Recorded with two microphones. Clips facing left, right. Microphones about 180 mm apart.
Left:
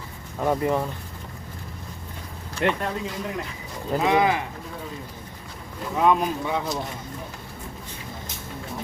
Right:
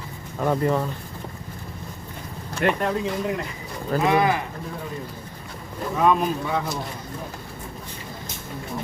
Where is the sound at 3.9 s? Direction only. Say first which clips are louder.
Right 1 dB; 20° left (ahead or behind).